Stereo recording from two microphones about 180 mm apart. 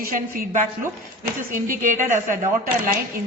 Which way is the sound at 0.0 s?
50° right (ahead or behind).